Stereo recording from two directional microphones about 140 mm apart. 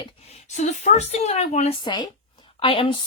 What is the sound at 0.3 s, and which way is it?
A woman's voice, 55° left (ahead or behind).